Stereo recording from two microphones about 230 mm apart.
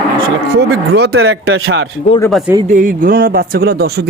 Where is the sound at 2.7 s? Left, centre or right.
Right.